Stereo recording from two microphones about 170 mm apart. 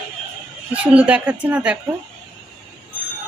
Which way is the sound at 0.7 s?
10° right (ahead or behind).